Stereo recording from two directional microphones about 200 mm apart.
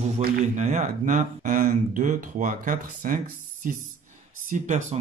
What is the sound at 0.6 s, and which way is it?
Speech, 35° right (ahead or behind).